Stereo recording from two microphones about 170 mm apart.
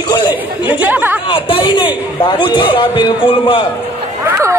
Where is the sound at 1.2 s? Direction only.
30° left (ahead or behind).